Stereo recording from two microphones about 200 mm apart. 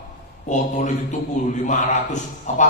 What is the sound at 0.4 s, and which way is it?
A man's voice, 40° left (ahead or behind).